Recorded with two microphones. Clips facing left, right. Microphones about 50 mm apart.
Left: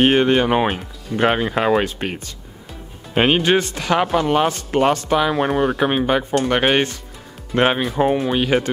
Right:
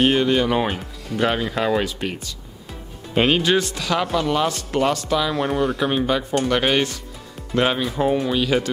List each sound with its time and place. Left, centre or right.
0.0 s speech: left